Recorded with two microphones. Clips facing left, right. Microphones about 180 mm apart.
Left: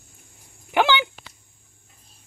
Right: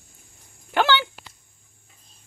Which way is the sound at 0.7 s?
15° left (ahead or behind).